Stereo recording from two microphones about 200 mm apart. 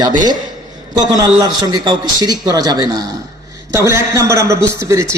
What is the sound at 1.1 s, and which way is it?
A man's voice, 20° right (ahead or behind).